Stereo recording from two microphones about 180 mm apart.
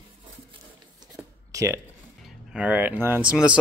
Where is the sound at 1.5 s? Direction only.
20° right (ahead or behind).